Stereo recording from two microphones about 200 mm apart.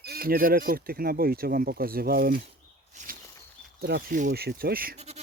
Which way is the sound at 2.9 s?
40° right (ahead or behind).